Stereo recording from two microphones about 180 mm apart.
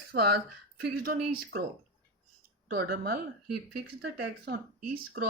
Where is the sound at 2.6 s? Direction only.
60° right (ahead or behind).